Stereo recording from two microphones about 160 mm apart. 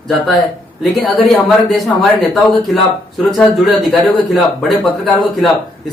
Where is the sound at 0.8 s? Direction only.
Centre (ahead or behind).